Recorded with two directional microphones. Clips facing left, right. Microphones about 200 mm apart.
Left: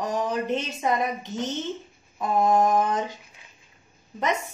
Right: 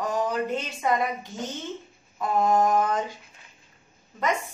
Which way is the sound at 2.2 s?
20° left (ahead or behind).